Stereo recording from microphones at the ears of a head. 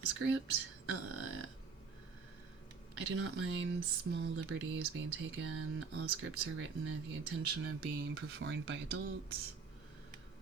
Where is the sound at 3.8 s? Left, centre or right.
Right.